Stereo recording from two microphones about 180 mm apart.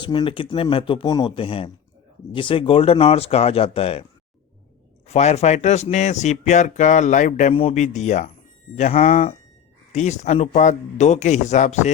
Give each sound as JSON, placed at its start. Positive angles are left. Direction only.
{"t": 0.0, "sound": "speech", "side_deg": 25}
{"t": 5.0, "sound": "speech", "side_deg": 40}